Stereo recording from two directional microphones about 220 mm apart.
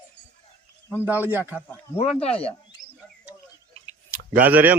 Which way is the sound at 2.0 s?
25° left (ahead or behind).